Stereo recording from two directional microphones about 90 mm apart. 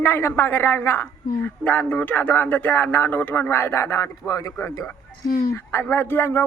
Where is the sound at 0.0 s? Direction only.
25° left (ahead or behind).